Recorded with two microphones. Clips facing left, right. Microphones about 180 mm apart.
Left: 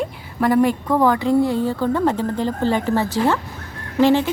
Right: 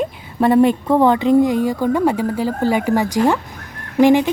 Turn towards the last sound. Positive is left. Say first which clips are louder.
# right 3 dB
turn(degrees=-15)  # may be behind; listen again after turning